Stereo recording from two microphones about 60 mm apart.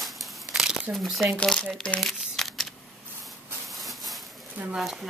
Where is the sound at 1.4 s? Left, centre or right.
Centre.